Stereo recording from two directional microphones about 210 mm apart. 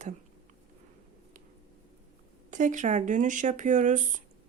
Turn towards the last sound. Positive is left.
turn(degrees=-35)  # may be behind; listen again after turning